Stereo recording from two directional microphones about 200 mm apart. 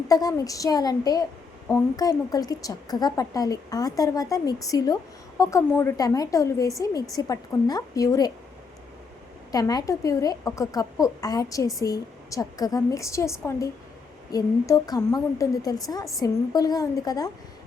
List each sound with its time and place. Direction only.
0.1 s a woman's voice: 20° left (ahead or behind)
9.5 s a woman's voice: 20° left (ahead or behind)